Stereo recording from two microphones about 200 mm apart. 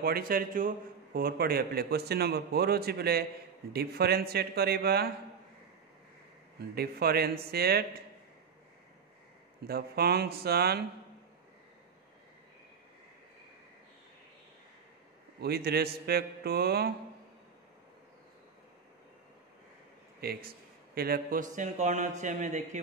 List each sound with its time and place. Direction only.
0.0 s a man's voice: 50° right (ahead or behind)
6.6 s a man's voice: 50° right (ahead or behind)
9.7 s a man's voice: 50° right (ahead or behind)
15.4 s a man's voice: 50° right (ahead or behind)
20.2 s a man's voice: 50° right (ahead or behind)